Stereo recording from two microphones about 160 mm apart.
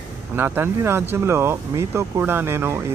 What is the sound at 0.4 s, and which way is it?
Speech, 15° right (ahead or behind).